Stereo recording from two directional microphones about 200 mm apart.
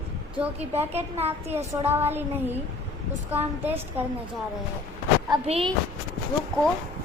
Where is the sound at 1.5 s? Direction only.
10° right (ahead or behind).